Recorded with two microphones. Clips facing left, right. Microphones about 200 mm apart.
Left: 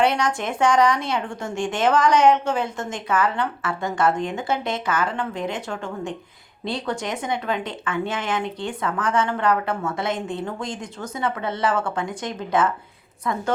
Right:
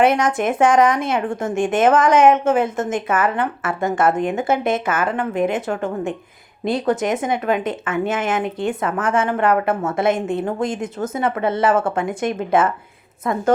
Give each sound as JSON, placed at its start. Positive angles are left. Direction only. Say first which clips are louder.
{"t": 0.0, "sound": "speech", "louder": "right 5 dB", "side_deg": -50}
{"t": 11.2, "sound": "speech", "louder": "right 5 dB", "side_deg": -55}